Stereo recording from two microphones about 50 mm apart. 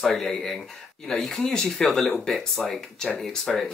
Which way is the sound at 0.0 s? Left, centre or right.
Centre.